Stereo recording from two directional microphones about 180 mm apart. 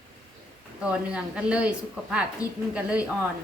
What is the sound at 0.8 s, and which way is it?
Speech, 5° right (ahead or behind).